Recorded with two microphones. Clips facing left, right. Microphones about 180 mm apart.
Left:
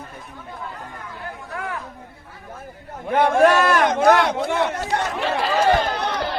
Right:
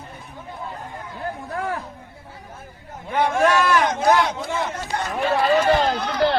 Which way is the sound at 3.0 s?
55° left (ahead or behind).